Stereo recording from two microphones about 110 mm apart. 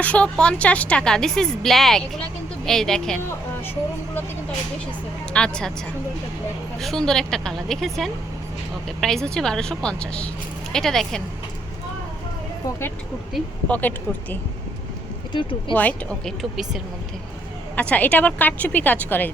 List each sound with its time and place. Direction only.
0.0 s speech: 10° left (ahead or behind)
5.3 s a woman's voice: 10° left (ahead or behind)
6.7 s a woman's voice: 5° left (ahead or behind)
13.7 s a woman's voice: 15° left (ahead or behind)
15.3 s speech: 45° left (ahead or behind)
15.7 s a woman's voice: 15° left (ahead or behind)
17.7 s a woman's voice: 10° left (ahead or behind)